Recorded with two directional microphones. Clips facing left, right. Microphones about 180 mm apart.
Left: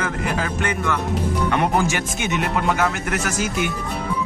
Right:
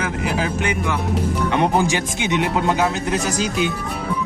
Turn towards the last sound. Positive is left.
turn(degrees=-15)  # may be behind; listen again after turning